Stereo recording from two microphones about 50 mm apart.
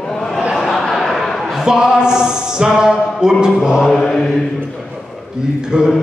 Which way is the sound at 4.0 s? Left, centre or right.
Centre.